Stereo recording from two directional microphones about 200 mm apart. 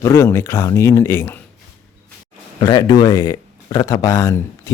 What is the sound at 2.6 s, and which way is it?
Speech, 20° left (ahead or behind).